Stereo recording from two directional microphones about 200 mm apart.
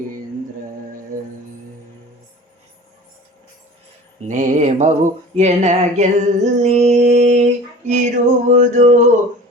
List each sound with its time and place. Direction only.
4.3 s music: 40° right (ahead or behind)